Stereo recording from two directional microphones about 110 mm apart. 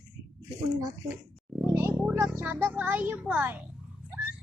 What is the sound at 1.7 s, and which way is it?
Speech, 25° right (ahead or behind).